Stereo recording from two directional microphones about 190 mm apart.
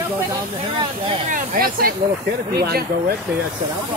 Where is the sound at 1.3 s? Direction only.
45° right (ahead or behind).